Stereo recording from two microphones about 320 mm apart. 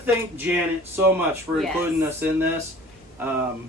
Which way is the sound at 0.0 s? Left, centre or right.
Centre.